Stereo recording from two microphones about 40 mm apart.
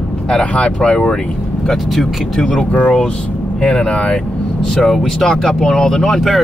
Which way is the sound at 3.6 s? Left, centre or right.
Centre.